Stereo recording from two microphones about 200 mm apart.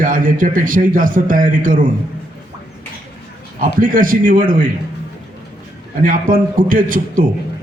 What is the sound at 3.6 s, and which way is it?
A man's voice, 45° right (ahead or behind).